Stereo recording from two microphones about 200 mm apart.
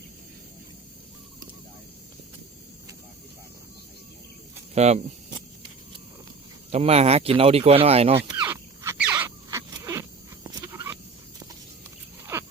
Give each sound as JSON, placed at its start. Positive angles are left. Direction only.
{"t": 4.7, "sound": "speech", "side_deg": -35}
{"t": 6.7, "sound": "speech", "side_deg": -30}
{"t": 8.4, "sound": "squeal", "side_deg": -15}
{"t": 12.2, "sound": "wild animals", "side_deg": -15}